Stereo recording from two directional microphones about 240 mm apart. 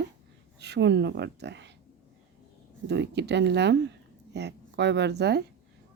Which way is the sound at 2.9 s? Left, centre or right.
Right.